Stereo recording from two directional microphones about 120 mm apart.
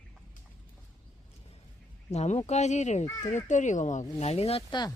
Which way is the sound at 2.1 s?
65° left (ahead or behind).